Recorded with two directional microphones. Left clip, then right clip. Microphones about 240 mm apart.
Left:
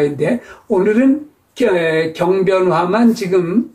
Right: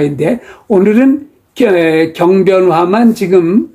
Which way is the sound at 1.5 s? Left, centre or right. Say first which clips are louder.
Right 5 dB; right.